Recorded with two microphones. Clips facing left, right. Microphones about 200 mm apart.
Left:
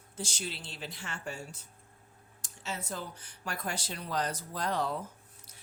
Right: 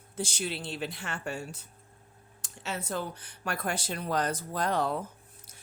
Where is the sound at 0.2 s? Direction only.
60° right (ahead or behind).